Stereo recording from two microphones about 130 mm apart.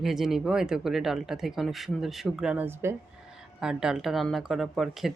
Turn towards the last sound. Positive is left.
turn(degrees=0)  # may be behind; listen again after turning